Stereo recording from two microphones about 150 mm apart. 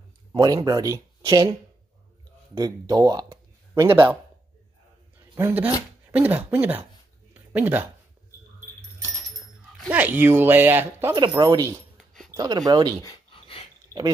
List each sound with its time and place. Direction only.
0.3 s speech: 25° right (ahead or behind)
2.5 s speech: 25° right (ahead or behind)
5.3 s speech: 15° right (ahead or behind)
7.3 s a sound: 10° right (ahead or behind)
9.8 s speech: 10° right (ahead or behind)
11.1 s speech: 25° right (ahead or behind)
13.0 s dog: 25° left (ahead or behind)